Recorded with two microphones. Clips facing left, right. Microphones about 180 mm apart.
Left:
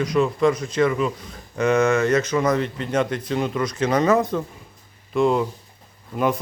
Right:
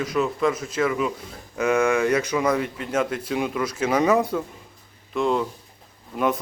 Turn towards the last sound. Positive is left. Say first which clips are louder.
# left 1 dB
turn(degrees=0)  # may be behind; listen again after turning